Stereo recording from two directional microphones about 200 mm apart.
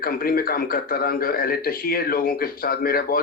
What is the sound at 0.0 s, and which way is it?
A man's voice, 45° left (ahead or behind).